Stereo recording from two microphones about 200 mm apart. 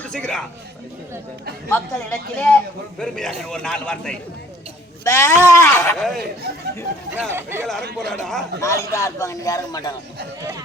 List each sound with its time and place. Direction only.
0.0 s speech: 5° left (ahead or behind)
1.7 s a man's voice: 10° left (ahead or behind)
6.0 s a man's voice: centre (ahead or behind)
7.1 s speech: 10° right (ahead or behind)
7.9 s a man's voice: centre (ahead or behind)
8.6 s a man's voice: 15° left (ahead or behind)